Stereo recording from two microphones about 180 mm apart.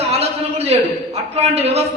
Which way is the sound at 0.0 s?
35° right (ahead or behind).